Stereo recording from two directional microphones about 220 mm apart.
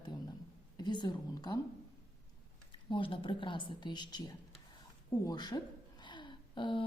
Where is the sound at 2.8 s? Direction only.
25° left (ahead or behind).